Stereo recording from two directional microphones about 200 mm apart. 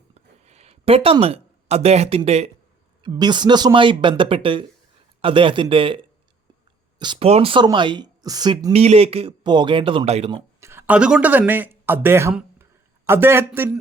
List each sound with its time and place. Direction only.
0.1 s a sound: 35° right (ahead or behind)
3.0 s speech: 20° right (ahead or behind)
10.6 s speech: 10° right (ahead or behind)